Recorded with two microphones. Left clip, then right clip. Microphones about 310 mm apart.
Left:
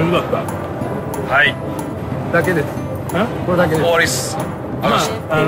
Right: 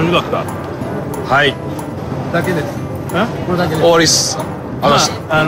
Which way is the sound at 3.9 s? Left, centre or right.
Centre.